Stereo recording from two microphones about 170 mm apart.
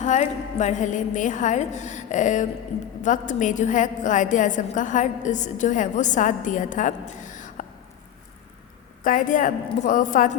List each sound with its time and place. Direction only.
0.0 s a woman's voice: 45° left (ahead or behind)
7.1 s a sound: 45° left (ahead or behind)
9.0 s a woman's voice: 50° left (ahead or behind)